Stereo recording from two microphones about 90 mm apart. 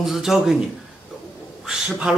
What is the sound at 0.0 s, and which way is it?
Speech, 5° right (ahead or behind).